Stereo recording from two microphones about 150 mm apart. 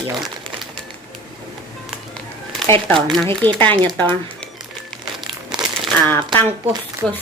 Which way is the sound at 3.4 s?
10° left (ahead or behind).